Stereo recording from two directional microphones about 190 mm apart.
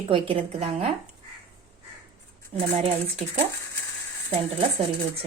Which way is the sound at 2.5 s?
35° right (ahead or behind).